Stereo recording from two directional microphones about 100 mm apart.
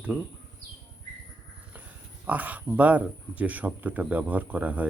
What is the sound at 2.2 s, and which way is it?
Speech, 15° right (ahead or behind).